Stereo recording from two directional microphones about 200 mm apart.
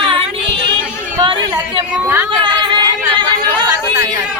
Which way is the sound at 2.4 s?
20° right (ahead or behind).